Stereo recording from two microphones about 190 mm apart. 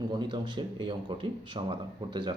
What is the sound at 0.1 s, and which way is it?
Speech, 25° right (ahead or behind).